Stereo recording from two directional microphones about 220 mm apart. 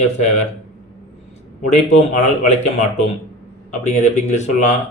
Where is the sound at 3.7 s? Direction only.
30° left (ahead or behind).